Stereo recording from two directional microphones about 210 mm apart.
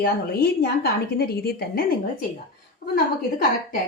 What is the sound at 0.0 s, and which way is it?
A woman's voice, 45° left (ahead or behind).